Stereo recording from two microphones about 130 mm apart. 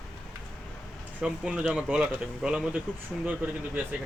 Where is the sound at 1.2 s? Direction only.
5° right (ahead or behind).